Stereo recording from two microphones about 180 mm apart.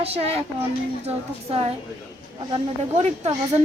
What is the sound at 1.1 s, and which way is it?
Speech, 35° right (ahead or behind).